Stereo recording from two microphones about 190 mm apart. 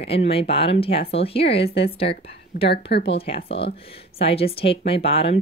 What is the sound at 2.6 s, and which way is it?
Speech, 60° left (ahead or behind).